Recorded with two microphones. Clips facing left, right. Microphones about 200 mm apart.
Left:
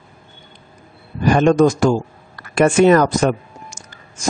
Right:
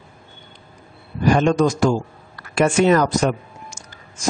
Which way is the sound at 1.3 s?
55° left (ahead or behind).